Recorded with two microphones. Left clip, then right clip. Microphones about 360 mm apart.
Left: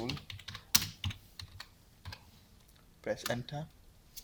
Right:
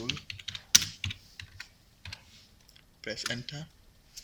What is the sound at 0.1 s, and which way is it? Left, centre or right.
Typing, centre.